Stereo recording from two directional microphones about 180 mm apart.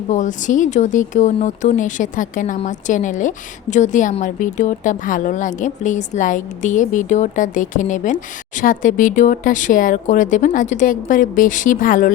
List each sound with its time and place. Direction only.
0.1 s a woman's voice: 45° left (ahead or behind)